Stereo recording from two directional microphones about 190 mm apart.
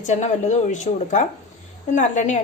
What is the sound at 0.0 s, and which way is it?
Speech, 40° left (ahead or behind).